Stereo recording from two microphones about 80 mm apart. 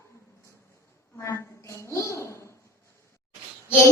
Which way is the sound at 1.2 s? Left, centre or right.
Left.